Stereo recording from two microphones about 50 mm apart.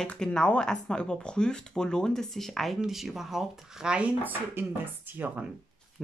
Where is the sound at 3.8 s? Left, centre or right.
Right.